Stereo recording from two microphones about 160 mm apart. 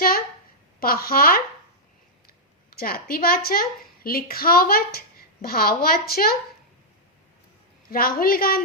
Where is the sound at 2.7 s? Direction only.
70° left (ahead or behind).